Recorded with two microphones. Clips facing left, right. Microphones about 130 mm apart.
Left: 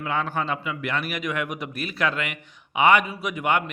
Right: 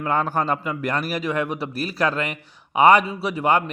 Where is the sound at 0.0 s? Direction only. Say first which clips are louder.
Right 4 dB; 40° right (ahead or behind).